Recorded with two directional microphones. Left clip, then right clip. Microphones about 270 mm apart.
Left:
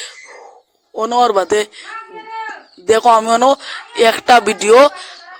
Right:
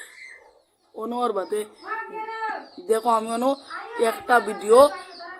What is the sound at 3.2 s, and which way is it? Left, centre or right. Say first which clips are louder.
Speech: left 13 dB; left.